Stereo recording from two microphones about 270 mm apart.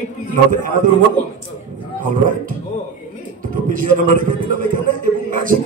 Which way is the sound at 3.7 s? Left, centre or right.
Right.